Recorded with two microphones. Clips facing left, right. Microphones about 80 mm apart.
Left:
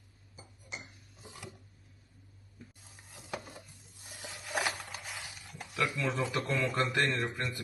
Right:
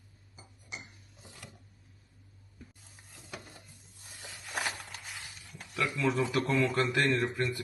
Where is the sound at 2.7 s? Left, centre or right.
Centre.